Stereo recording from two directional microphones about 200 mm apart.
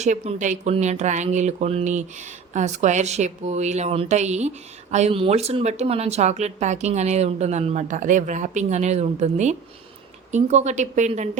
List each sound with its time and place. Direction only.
0.0 s speech: 35° right (ahead or behind)